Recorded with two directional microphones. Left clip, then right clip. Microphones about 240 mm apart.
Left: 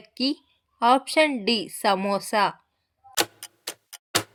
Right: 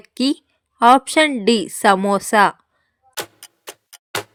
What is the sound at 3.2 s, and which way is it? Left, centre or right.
Tick-tock, centre.